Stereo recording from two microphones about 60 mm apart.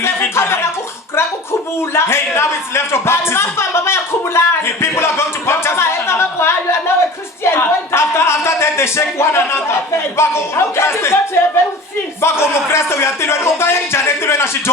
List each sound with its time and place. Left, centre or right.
0.0 s speech: left
1.8 s a sound: left
10.2 s speech: left
12.2 s speech: left